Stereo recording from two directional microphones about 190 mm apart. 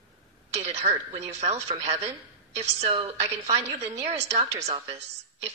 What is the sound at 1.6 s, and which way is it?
A woman's voice, 35° right (ahead or behind).